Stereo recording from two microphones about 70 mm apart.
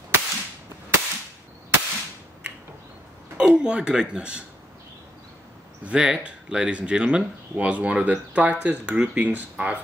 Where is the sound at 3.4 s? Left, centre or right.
Centre.